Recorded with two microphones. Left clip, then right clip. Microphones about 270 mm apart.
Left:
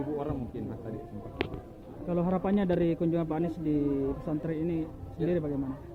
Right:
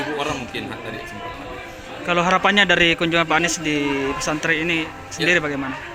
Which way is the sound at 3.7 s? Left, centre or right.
Right.